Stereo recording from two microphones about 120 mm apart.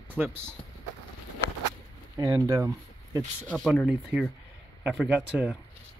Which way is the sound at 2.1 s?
30° right (ahead or behind).